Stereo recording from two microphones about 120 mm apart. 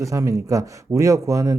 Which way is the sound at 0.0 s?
25° right (ahead or behind).